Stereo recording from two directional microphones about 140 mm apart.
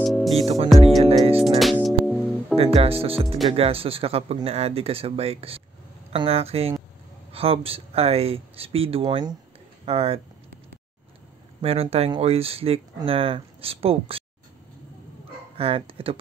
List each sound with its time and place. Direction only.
0.0 s music: centre (ahead or behind)
0.8 s music: 45° right (ahead or behind)
1.4 s music: centre (ahead or behind)
2.5 s speech: 45° right (ahead or behind)
11.6 s speech: 45° right (ahead or behind)
15.5 s speech: 40° right (ahead or behind)